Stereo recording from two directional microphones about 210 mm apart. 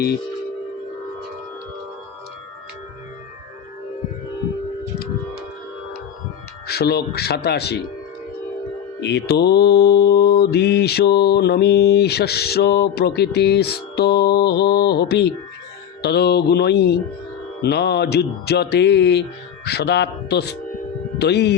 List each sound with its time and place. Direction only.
6.7 s mantra: 50° left (ahead or behind)
9.0 s mantra: 55° left (ahead or behind)